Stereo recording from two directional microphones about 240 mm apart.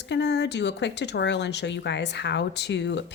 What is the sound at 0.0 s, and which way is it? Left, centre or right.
Speech, left.